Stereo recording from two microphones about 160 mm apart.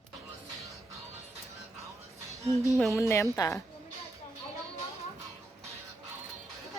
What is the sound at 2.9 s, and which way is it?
Speech, 20° left (ahead or behind).